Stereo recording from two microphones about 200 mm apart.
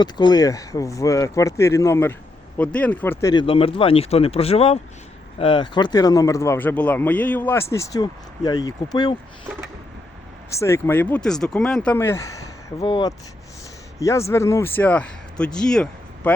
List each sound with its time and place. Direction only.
0.0 s speech: 20° left (ahead or behind)
10.5 s speech: 15° left (ahead or behind)